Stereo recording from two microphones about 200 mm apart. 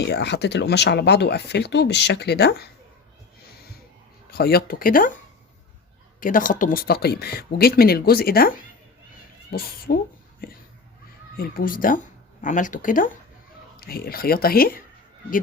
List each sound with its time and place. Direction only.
0.0 s speech: 60° left (ahead or behind)
4.3 s speech: 50° left (ahead or behind)
11.3 s speech: 45° left (ahead or behind)